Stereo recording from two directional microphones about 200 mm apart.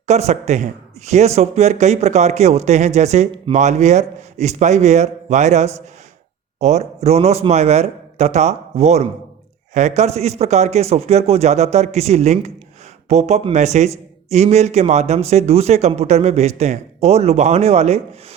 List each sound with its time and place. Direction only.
0.1 s a man's voice: 35° right (ahead or behind)